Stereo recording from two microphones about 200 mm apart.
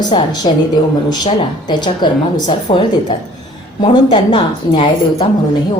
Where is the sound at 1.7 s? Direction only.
20° left (ahead or behind).